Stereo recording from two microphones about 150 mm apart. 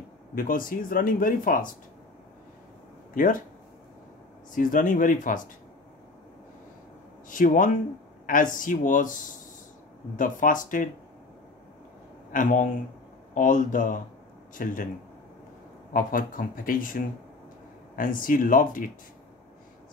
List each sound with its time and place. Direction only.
0.3 s speech: 70° left (ahead or behind)
3.2 s speech: 60° left (ahead or behind)
4.6 s speech: 60° left (ahead or behind)
7.2 s speech: 65° left (ahead or behind)
10.1 s speech: 60° left (ahead or behind)
12.3 s speech: 60° left (ahead or behind)
15.9 s speech: 65° left (ahead or behind)